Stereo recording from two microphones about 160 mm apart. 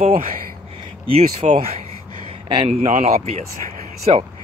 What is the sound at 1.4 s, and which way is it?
Speech, 40° right (ahead or behind).